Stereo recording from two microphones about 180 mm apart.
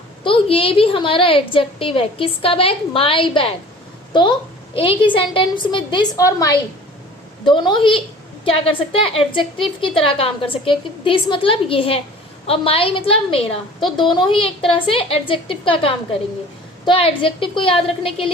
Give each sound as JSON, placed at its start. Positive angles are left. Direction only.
{"t": 0.3, "sound": "a woman's voice", "side_deg": 30}